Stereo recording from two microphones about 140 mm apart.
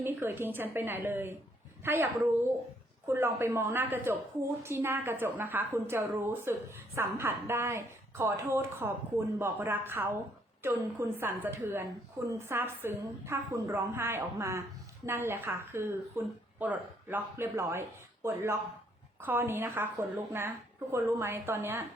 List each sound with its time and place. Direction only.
0.0 s a woman's voice: 15° right (ahead or behind)